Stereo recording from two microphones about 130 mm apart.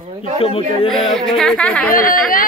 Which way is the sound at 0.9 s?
Centre (ahead or behind).